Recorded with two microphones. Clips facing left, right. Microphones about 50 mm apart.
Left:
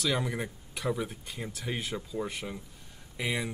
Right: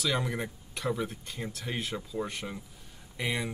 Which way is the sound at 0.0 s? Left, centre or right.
Centre.